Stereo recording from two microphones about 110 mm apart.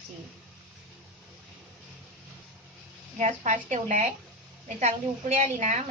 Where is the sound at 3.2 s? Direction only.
90° right.